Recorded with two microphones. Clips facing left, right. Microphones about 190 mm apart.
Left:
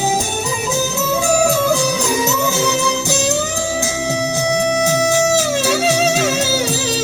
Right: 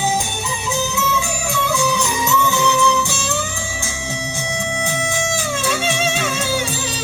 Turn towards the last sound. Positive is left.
turn(degrees=40)  # may be behind; listen again after turning